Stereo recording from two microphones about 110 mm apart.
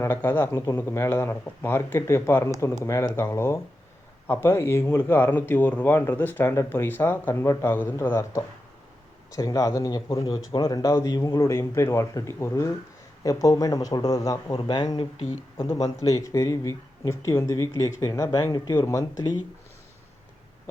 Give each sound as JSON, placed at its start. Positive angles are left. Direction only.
{"t": 0.0, "sound": "speech", "side_deg": 20}
{"t": 10.2, "sound": "speech", "side_deg": 50}
{"t": 14.6, "sound": "speech", "side_deg": 45}
{"t": 15.7, "sound": "speech", "side_deg": 35}
{"t": 18.9, "sound": "speech", "side_deg": 30}